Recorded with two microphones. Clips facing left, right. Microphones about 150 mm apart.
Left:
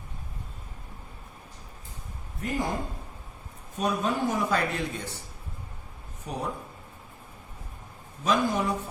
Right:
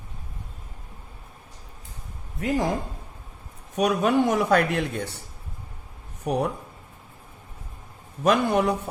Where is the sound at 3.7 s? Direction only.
75° right (ahead or behind).